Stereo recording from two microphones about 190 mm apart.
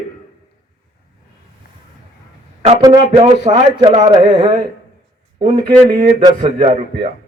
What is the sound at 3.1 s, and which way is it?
A man's voice, 35° right (ahead or behind).